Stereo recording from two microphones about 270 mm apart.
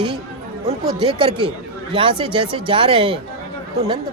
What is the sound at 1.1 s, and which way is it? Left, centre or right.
A woman's voice, centre.